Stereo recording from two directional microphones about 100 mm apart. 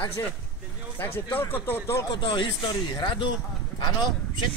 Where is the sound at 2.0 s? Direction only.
50° left (ahead or behind).